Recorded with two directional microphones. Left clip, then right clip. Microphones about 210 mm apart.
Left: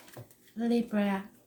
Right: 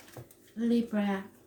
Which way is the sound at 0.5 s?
35° left (ahead or behind).